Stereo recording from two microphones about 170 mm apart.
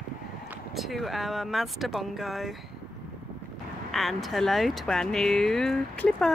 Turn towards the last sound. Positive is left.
turn(degrees=5)  # may be behind; listen again after turning